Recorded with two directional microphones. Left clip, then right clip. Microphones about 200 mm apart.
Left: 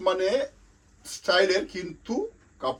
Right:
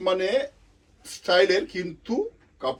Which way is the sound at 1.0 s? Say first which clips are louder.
Right 2 dB; 25° left (ahead or behind).